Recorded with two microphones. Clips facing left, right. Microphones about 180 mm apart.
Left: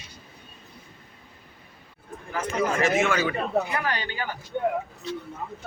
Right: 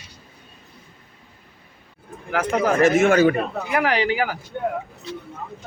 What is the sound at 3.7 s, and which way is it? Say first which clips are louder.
Speech: right 9 dB; 90° right.